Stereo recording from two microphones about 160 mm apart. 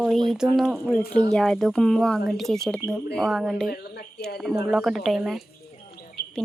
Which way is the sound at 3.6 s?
80° left.